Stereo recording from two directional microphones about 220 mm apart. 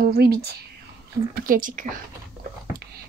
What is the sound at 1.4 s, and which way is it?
Speech, 40° right (ahead or behind).